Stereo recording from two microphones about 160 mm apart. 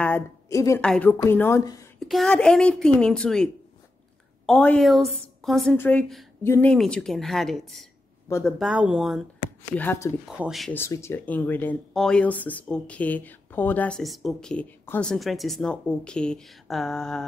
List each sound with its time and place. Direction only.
0.0 s a woman's voice: 15° left (ahead or behind)
0.7 s speech: 5° left (ahead or behind)
2.0 s a woman's voice: centre (ahead or behind)
4.5 s a woman's voice: 5° left (ahead or behind)
6.4 s speech: 15° left (ahead or behind)
6.7 s a woman's voice: 5° left (ahead or behind)
9.4 s speech: 15° left (ahead or behind)
10.2 s a woman's voice: 5° right (ahead or behind)
10.7 s speech: 15° left (ahead or behind)